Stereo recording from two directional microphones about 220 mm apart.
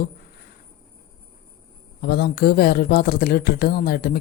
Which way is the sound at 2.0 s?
45° left (ahead or behind).